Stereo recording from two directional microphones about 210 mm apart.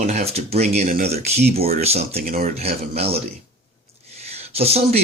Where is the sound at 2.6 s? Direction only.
30° right (ahead or behind).